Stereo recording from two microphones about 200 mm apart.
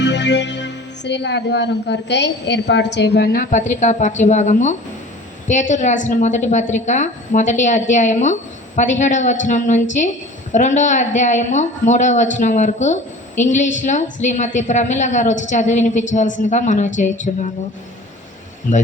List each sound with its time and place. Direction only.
0.0 s speech: 60° left (ahead or behind); by 17.1 s 35° left (ahead or behind)